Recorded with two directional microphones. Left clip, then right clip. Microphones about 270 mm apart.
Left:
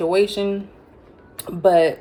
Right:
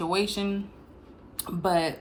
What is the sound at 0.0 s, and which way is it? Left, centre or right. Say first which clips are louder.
Speech: left 9 dB; centre.